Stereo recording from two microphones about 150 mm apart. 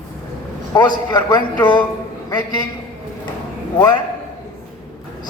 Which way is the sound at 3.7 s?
30° left (ahead or behind).